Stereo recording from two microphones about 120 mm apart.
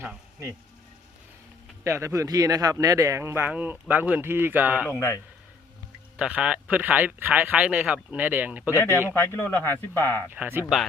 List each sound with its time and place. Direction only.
1.8 s a man's voice: 25° right (ahead or behind)
4.9 s a man's voice: 25° left (ahead or behind)
6.1 s speech: 10° right (ahead or behind)
8.7 s a man's voice: 20° left (ahead or behind)
10.3 s speech: 15° right (ahead or behind)